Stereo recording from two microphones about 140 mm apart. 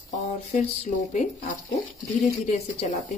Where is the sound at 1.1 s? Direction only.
55° left (ahead or behind).